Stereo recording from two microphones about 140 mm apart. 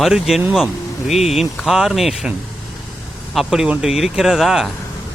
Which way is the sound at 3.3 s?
Centre (ahead or behind).